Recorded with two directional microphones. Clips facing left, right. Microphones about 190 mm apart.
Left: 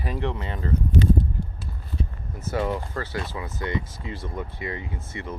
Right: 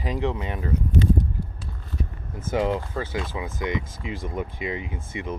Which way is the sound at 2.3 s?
20° right (ahead or behind).